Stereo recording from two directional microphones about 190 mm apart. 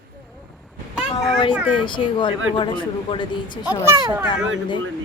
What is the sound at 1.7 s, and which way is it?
A man's voice, 25° left (ahead or behind).